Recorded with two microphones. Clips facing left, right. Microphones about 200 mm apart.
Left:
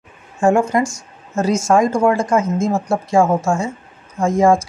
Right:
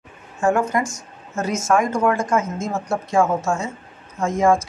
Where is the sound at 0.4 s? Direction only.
25° left (ahead or behind).